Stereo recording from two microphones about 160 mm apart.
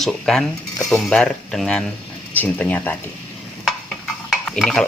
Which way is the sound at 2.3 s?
10° left (ahead or behind).